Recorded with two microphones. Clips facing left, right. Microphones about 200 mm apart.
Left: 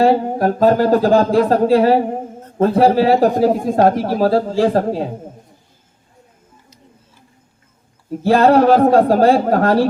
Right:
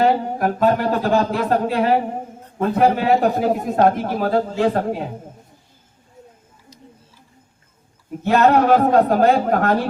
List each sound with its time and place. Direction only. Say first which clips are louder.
0.0 s a man's voice: left 4 dB; 35° left (ahead or behind)
8.2 s a man's voice: left 4 dB; 35° left (ahead or behind)